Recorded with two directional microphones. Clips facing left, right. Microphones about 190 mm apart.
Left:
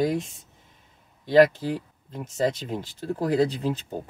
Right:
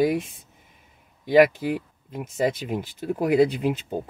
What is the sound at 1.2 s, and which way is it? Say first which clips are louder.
Speech: right 1 dB; 10° right (ahead or behind).